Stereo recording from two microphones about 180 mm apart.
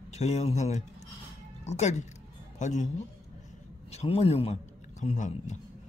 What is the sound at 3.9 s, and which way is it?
Speech, 35° left (ahead or behind).